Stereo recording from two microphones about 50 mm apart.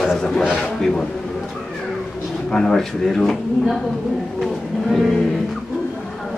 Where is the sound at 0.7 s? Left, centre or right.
Centre.